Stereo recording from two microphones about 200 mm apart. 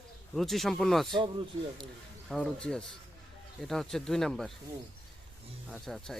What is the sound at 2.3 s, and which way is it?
Speech, 5° left (ahead or behind).